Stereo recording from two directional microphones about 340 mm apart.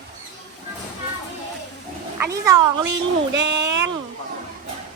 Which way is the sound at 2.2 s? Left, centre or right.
Centre.